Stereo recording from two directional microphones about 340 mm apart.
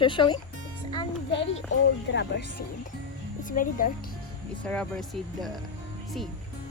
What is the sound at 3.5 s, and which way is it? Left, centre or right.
Speech, left.